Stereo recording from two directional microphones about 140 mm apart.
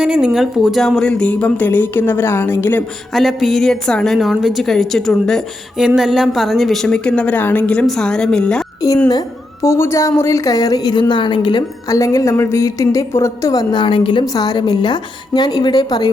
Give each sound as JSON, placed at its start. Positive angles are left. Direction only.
{"t": 0.0, "sound": "speech", "side_deg": -5}
{"t": 3.2, "sound": "a woman's voice", "side_deg": 0}
{"t": 9.6, "sound": "a woman's voice", "side_deg": 20}